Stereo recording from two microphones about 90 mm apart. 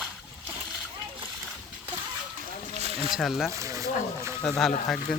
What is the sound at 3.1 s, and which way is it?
Speech, 5° right (ahead or behind).